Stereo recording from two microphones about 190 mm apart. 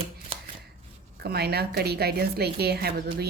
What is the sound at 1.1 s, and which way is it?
A woman's voice, 55° right (ahead or behind).